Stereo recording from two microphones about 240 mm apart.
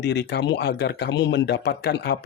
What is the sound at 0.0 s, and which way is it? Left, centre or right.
Speech, left.